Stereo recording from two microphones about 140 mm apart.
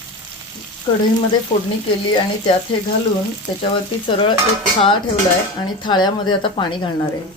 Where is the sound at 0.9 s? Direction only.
35° left (ahead or behind).